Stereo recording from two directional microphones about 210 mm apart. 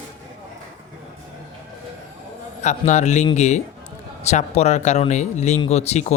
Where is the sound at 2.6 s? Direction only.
35° left (ahead or behind).